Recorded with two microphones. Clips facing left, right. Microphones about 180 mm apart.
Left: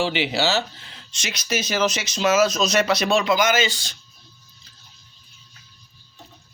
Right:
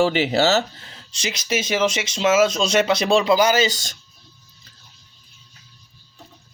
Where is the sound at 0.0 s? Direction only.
45° right (ahead or behind).